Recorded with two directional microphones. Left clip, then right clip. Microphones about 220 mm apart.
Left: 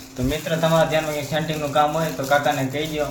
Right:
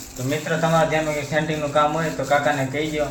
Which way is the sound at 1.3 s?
Centre (ahead or behind).